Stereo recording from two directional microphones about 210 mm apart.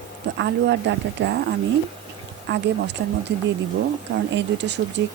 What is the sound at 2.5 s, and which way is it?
Speech, 55° right (ahead or behind).